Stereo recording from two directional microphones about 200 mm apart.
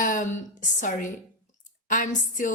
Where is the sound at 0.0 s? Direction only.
40° left (ahead or behind).